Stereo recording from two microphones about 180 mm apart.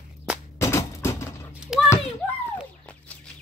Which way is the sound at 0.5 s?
15° left (ahead or behind).